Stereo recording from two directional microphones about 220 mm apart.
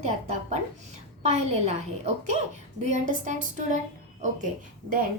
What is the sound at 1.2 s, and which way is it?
A woman's voice, 30° right (ahead or behind).